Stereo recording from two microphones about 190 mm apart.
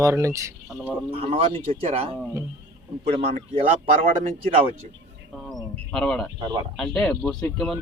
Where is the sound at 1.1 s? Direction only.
30° right (ahead or behind).